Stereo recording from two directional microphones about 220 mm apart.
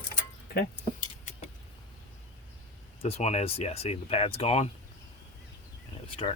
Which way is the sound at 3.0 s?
30° left (ahead or behind).